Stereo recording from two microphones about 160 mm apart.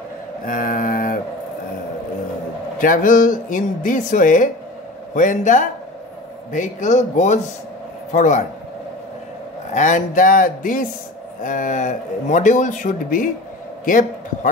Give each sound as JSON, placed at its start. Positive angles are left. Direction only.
{"t": 0.5, "sound": "mantra", "side_deg": 60}
{"t": 2.8, "sound": "speech", "side_deg": 55}
{"t": 9.8, "sound": "a man's voice", "side_deg": 50}